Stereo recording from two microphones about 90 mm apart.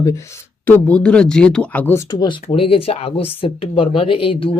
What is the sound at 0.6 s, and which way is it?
Speech, 15° left (ahead or behind).